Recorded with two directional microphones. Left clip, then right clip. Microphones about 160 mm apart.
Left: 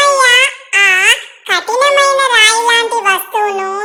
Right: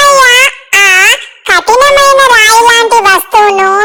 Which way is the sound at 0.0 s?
45° right (ahead or behind).